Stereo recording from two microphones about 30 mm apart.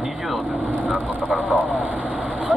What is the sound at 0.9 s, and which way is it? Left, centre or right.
Vehicle, right.